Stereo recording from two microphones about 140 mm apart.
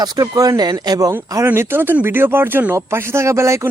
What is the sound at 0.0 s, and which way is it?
Speech, 25° right (ahead or behind).